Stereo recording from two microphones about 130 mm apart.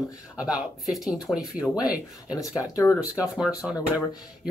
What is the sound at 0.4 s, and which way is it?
Speech, 5° right (ahead or behind).